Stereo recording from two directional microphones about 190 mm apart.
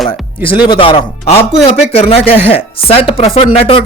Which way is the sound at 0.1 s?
25° left (ahead or behind).